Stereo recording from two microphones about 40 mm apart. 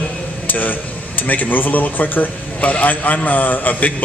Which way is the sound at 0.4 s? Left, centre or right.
Left.